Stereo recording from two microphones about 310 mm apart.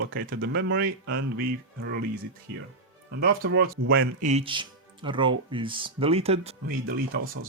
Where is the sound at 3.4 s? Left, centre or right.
Right.